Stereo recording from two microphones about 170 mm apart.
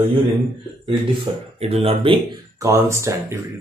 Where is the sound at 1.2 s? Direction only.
35° right (ahead or behind).